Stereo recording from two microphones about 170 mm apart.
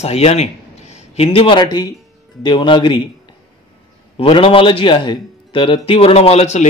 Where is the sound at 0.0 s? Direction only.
40° left (ahead or behind).